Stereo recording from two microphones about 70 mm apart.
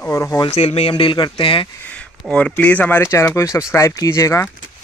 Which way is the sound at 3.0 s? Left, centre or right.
Left.